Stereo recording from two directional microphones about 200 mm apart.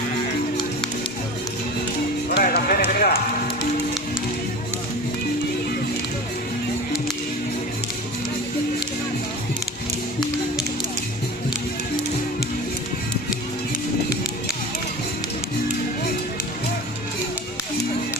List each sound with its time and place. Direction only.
2.3 s music: 50° left (ahead or behind)